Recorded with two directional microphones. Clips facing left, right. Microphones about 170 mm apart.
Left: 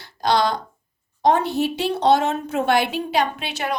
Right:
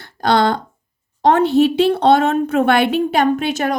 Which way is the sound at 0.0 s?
55° right (ahead or behind).